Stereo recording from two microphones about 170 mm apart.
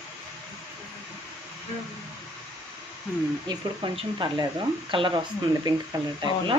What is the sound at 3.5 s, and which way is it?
Speech, 25° right (ahead or behind).